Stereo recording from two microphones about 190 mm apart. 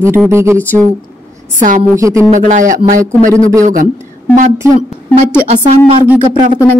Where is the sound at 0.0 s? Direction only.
15° right (ahead or behind).